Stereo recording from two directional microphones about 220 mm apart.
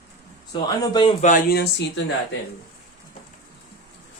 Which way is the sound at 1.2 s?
35° left (ahead or behind).